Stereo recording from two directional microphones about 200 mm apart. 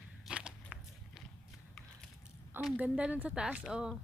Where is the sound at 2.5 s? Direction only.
5° right (ahead or behind).